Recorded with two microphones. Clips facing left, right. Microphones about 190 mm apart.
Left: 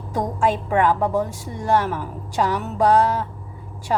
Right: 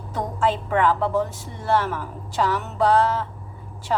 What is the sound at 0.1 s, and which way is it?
A woman's voice, 15° left (ahead or behind).